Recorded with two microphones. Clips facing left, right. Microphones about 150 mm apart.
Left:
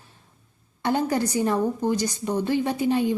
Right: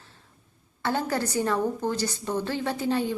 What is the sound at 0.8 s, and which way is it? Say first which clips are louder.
A woman's voice: left 4 dB; 15° left (ahead or behind).